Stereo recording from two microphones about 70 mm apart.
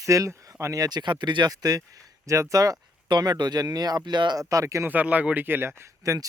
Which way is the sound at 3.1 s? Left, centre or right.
Right.